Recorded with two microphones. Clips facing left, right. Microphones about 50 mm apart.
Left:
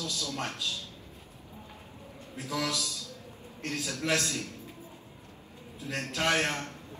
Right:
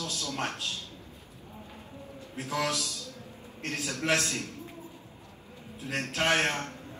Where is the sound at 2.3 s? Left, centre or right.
Right.